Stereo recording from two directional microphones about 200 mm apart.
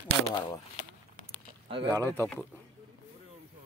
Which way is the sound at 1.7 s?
25° right (ahead or behind).